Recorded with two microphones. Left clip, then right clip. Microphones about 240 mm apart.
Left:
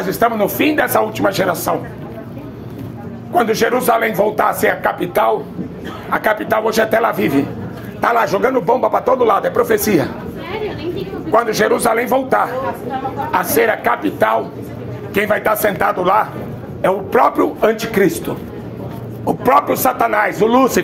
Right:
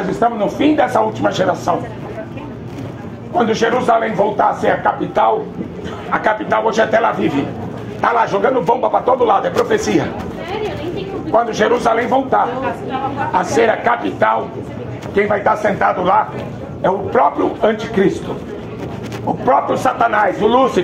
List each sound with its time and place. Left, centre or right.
0.6 s speech: left
3.3 s speech: left
11.5 s speech: left
19.4 s speech: left